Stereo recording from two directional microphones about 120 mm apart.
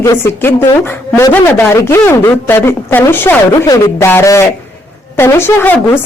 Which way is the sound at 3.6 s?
30° left (ahead or behind).